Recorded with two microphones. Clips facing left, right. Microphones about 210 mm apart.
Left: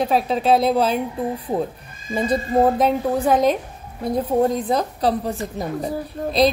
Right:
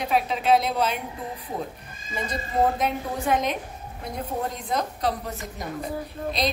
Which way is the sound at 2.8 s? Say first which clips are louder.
Left 8 dB; 35° left (ahead or behind).